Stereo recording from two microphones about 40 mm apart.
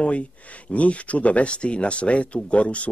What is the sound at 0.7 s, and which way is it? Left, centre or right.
Speech, left.